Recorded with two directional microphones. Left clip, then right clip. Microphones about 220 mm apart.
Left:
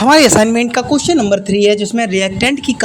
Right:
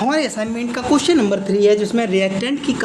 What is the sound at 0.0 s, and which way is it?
Speech, 40° left (ahead or behind).